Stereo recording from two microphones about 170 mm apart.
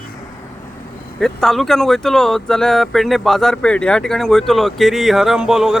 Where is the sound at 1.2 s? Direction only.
Centre (ahead or behind).